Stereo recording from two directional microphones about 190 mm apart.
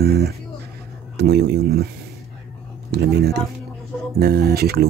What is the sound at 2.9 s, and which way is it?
Speech, 60° right (ahead or behind).